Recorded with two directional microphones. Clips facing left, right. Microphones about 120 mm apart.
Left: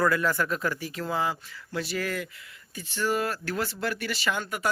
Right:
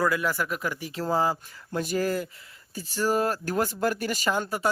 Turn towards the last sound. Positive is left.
turn(degrees=-35)  # may be behind; listen again after turning